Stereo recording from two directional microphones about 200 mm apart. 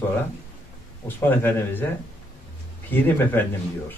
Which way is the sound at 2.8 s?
10° left (ahead or behind).